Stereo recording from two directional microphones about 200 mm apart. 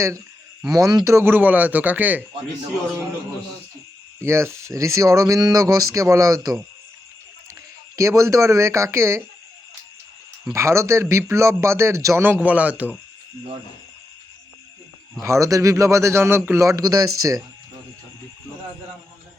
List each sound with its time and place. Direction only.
0.7 s speech: 20° right (ahead or behind)
4.2 s speech: 15° right (ahead or behind)
7.9 s speech: 15° right (ahead or behind)
10.5 s speech: 15° right (ahead or behind)
15.2 s speech: 15° right (ahead or behind)